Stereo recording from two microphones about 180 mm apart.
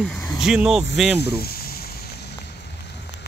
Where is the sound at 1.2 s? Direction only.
60° left (ahead or behind).